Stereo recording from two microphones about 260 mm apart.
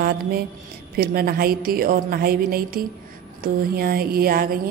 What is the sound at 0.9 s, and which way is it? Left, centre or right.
A woman's voice, right.